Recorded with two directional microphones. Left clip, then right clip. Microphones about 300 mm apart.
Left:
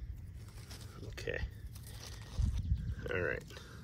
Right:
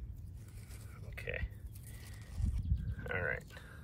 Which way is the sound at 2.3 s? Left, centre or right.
Left.